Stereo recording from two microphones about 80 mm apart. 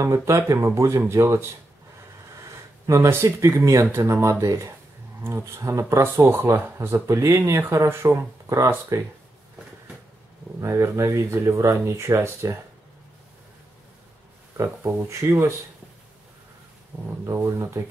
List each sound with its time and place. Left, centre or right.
0.0 s speech: right
10.6 s speech: right
14.6 s speech: right
16.9 s speech: right
17.3 s speech: right